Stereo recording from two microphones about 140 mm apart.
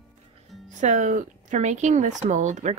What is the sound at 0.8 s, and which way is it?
Speech, 60° right (ahead or behind).